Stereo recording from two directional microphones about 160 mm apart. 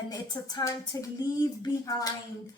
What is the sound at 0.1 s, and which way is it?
A woman's voice, 25° left (ahead or behind).